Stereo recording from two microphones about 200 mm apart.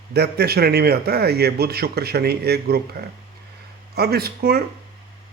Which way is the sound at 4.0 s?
50° right (ahead or behind).